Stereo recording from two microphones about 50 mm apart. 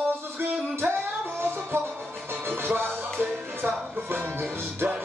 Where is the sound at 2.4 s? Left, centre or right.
Right.